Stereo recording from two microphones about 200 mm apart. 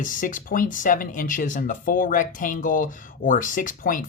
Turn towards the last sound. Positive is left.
turn(degrees=40)  # may be behind; listen again after turning